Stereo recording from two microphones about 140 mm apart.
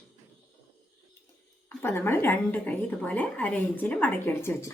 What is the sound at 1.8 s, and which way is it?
A woman's voice, 15° left (ahead or behind).